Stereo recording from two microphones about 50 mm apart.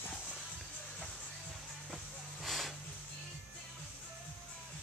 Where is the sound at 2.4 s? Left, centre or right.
Centre.